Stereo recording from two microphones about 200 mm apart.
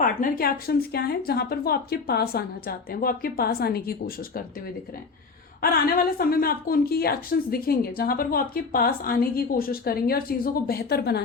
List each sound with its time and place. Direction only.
0.0 s speech: 45° left (ahead or behind)
6.0 s speech: 50° left (ahead or behind)